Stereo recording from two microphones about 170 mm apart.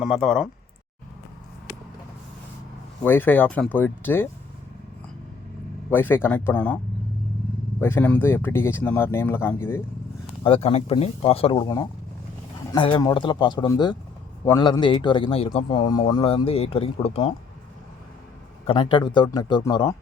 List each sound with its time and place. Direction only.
0.0 s speech: centre (ahead or behind)
3.0 s speech: 10° left (ahead or behind)
5.9 s speech: 10° left (ahead or behind)
7.8 s speech: 15° left (ahead or behind)
10.4 s speech: 35° left (ahead or behind)
12.7 s a man's voice: 30° left (ahead or behind)
18.6 s a man's voice: 30° left (ahead or behind)